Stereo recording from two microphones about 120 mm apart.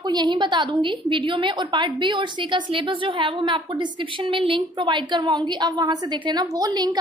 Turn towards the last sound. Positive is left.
turn(degrees=-35)  # may be behind; listen again after turning